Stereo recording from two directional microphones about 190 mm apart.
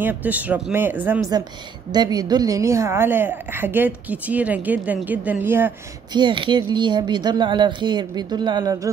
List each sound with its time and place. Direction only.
0.0 s a woman's voice: 10° right (ahead or behind)
6.1 s speech: 25° right (ahead or behind)